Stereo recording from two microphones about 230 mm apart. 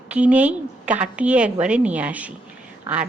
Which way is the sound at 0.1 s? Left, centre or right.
Centre.